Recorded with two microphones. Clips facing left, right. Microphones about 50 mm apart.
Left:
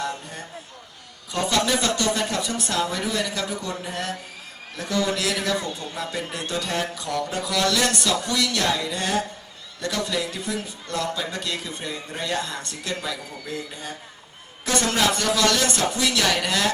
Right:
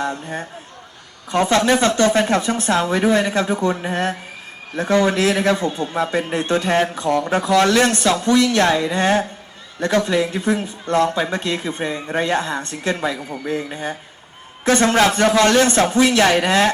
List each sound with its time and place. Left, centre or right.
0.0 s speech: right